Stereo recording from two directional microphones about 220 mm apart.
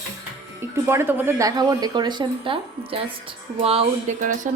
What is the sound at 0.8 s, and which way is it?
A woman's voice, 10° right (ahead or behind).